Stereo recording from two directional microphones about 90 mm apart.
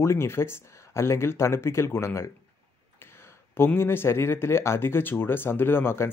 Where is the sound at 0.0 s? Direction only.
30° left (ahead or behind).